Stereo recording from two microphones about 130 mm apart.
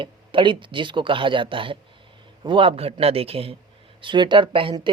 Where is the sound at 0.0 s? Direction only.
40° right (ahead or behind).